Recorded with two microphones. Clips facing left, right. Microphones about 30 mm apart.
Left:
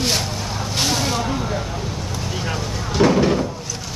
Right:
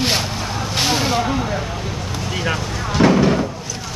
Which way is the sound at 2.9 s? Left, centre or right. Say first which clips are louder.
Right 2 dB; centre.